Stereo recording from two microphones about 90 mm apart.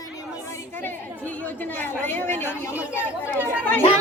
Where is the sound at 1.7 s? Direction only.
20° left (ahead or behind).